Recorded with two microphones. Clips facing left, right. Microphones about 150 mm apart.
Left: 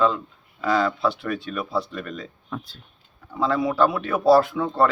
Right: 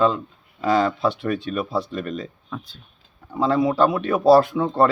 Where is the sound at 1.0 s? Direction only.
15° right (ahead or behind).